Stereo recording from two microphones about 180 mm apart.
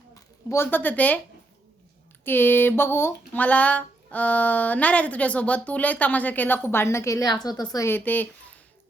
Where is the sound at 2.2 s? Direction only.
10° left (ahead or behind).